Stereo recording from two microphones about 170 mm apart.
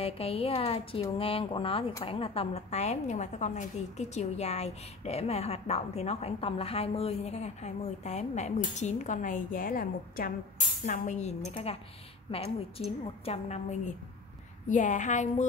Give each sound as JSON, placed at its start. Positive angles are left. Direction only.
{"t": 0.0, "sound": "a woman's voice", "side_deg": 35}
{"t": 10.9, "sound": "a woman's voice", "side_deg": 45}